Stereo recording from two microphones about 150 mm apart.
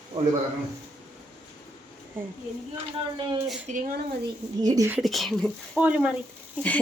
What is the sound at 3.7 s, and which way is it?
Speech, 50° right (ahead or behind).